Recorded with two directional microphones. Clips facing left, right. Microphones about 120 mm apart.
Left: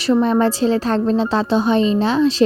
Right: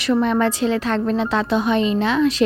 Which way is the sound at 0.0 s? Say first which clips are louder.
Left 3 dB; 30° left (ahead or behind).